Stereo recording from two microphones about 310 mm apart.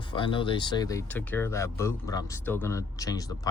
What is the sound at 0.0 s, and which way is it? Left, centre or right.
Speech, centre.